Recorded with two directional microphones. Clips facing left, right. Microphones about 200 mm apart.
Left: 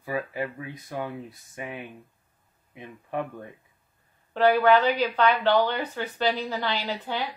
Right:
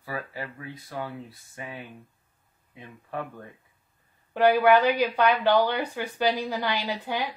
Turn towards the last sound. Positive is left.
turn(degrees=-15)  # may be behind; listen again after turning